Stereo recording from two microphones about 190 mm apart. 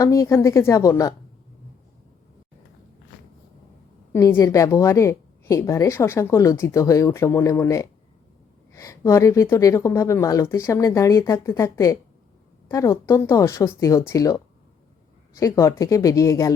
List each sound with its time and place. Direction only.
0.0 s a woman's voice: 15° left (ahead or behind)
4.1 s a woman's voice: 15° left (ahead or behind)